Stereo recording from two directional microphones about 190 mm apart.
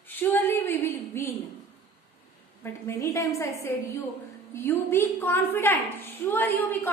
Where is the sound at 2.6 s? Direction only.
15° left (ahead or behind).